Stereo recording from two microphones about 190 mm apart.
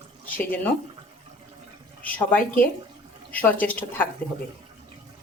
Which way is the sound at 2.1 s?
10° left (ahead or behind).